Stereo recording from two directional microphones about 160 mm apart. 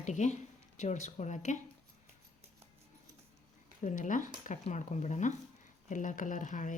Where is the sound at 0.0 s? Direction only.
45° left (ahead or behind).